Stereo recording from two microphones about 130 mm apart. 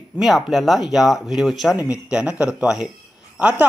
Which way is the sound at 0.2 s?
Centre (ahead or behind).